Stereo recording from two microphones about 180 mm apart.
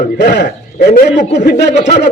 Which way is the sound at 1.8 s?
70° left (ahead or behind).